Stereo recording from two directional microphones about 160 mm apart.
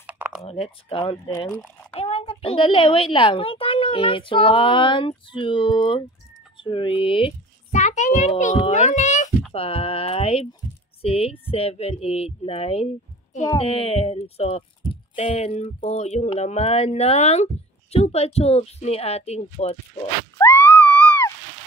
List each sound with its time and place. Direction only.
0.0 s a sound: 10° right (ahead or behind)
0.4 s a child's voice: 35° left (ahead or behind)
1.5 s a child's voice: 10° left (ahead or behind)
2.0 s a child's voice: 40° left (ahead or behind)
7.7 s a child's voice: 50° left (ahead or behind)
9.5 s a child's voice: 35° left (ahead or behind)
20.3 s a sound: 15° left (ahead or behind)